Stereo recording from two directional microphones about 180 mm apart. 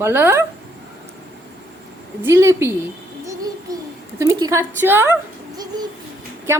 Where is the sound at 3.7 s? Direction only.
20° right (ahead or behind).